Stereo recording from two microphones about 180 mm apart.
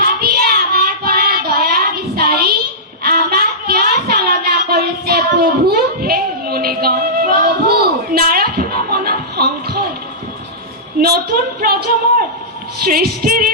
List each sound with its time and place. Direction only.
0.0 s child singing: 55° right (ahead or behind)
3.0 s a sound: 55° right (ahead or behind)
11.0 s a woman's voice: 55° right (ahead or behind)
12.8 s music: 55° right (ahead or behind)